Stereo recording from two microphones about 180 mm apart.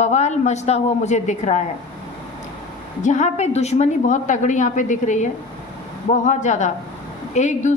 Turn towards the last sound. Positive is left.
turn(degrees=40)  # may be behind; listen again after turning